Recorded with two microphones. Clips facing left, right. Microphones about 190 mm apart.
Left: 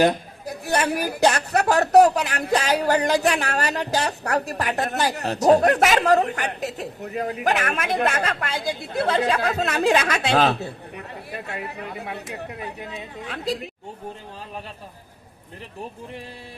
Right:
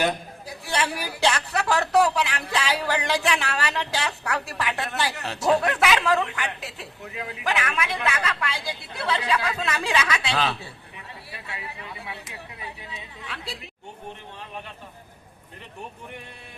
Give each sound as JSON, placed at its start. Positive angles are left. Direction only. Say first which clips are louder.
{"t": 0.0, "sound": "a man's voice", "louder": "left 6 dB", "side_deg": 45}